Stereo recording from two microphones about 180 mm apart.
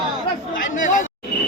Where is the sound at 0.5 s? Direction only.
45° left (ahead or behind).